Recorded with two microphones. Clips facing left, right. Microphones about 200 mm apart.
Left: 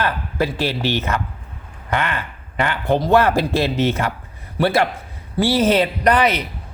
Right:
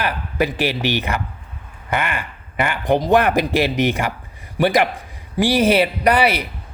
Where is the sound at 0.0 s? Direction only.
15° right (ahead or behind).